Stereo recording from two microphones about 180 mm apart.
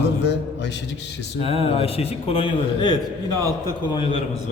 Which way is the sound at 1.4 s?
35° left (ahead or behind).